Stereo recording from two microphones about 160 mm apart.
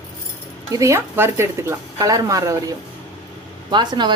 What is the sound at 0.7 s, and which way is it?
Speech, 20° right (ahead or behind).